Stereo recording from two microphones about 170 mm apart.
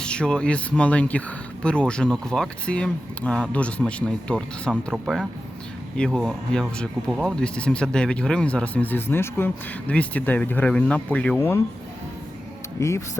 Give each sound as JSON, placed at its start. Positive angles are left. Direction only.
{"t": 0.0, "sound": "speech", "side_deg": 5}
{"t": 12.8, "sound": "speech", "side_deg": 20}